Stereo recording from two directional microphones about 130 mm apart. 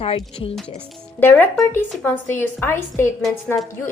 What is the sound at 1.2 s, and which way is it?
A woman's voice, 15° left (ahead or behind).